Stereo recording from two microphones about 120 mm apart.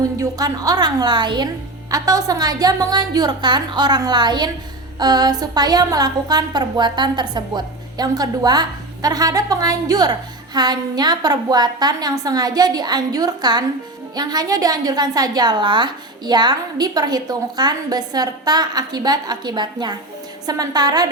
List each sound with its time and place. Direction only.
0.0 s a woman's voice: 30° right (ahead or behind)